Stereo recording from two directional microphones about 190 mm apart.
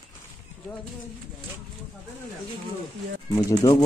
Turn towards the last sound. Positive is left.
turn(degrees=20)  # may be behind; listen again after turning